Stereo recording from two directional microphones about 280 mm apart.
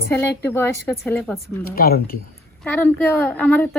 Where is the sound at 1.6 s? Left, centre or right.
Left.